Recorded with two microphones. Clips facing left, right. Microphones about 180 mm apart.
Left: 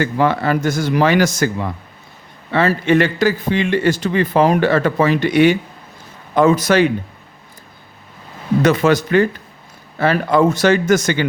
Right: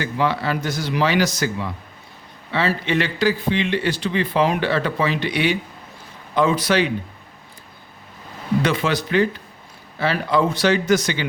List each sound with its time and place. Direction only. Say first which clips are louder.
0.0 s speech: left 5 dB; 50° left (ahead or behind)
8.6 s speech: left 11 dB; 45° left (ahead or behind)